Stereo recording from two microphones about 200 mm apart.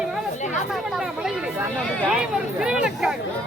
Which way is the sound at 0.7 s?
Centre (ahead or behind).